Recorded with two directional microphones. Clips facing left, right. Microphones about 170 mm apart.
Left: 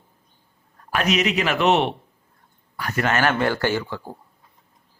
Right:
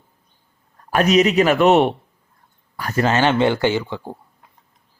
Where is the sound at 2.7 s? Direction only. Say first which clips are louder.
Right 4 dB; 35° right (ahead or behind).